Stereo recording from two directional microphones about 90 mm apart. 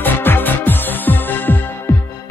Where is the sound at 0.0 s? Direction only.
20° left (ahead or behind).